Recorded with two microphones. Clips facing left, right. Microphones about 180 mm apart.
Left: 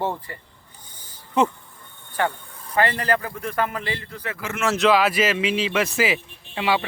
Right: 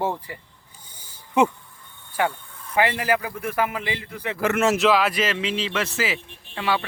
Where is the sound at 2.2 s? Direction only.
10° right (ahead or behind).